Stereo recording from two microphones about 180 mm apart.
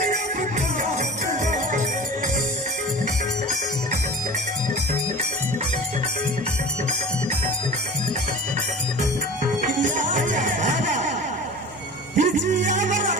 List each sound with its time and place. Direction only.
9.6 s music: 45° right (ahead or behind)
12.1 s music: 45° right (ahead or behind)